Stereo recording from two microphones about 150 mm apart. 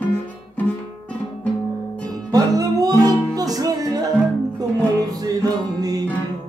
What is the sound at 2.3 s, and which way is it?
Music, 25° right (ahead or behind).